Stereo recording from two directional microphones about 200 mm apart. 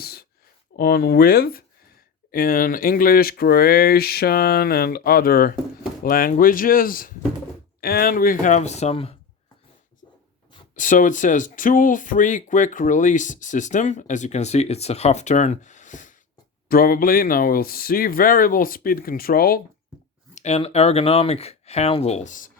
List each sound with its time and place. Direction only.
0.0 s a sound: 50° left (ahead or behind)
0.8 s speech: 50° left (ahead or behind); by 9.1 s 30° left (ahead or behind)
10.8 s speech: 40° left (ahead or behind)
20.3 s speech: 35° left (ahead or behind)